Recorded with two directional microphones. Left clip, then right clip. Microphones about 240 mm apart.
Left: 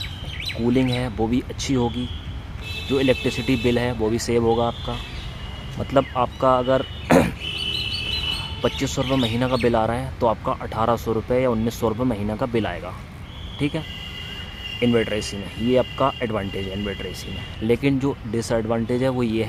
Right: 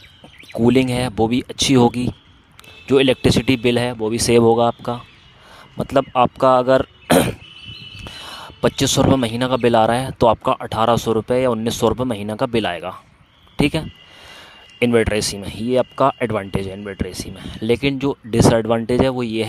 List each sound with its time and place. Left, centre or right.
0.6 s speech: right
8.6 s speech: right